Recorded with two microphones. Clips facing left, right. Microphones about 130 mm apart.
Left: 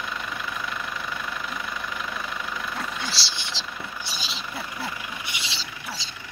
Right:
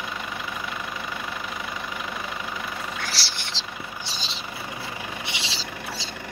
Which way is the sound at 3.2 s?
15° left (ahead or behind).